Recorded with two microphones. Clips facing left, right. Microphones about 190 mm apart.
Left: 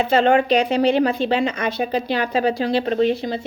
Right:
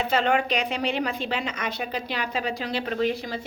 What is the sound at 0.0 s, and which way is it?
A woman's voice, 30° left (ahead or behind).